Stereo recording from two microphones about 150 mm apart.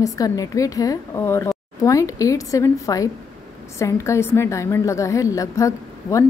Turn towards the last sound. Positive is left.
turn(degrees=20)  # may be behind; listen again after turning